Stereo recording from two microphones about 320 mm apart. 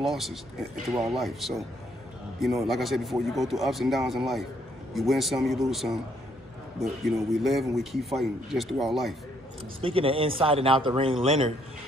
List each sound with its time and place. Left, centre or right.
0.0 s a man's voice: centre
9.8 s a man's voice: centre